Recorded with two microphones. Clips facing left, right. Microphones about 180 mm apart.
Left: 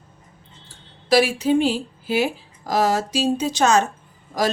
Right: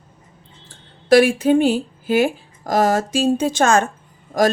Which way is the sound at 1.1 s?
50° right (ahead or behind).